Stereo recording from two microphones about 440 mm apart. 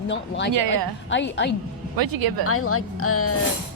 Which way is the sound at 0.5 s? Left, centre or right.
Right.